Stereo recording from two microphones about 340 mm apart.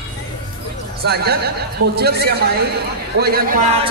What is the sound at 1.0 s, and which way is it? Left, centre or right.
A man's voice, right.